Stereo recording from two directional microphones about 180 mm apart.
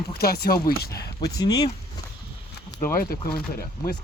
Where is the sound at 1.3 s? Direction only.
20° left (ahead or behind).